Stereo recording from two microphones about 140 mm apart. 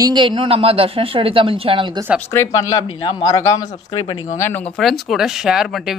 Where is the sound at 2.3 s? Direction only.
20° left (ahead or behind).